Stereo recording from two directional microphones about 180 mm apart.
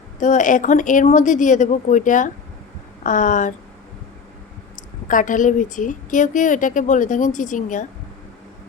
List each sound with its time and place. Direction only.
0.2 s a woman's voice: 45° left (ahead or behind)
5.0 s a woman's voice: 45° left (ahead or behind)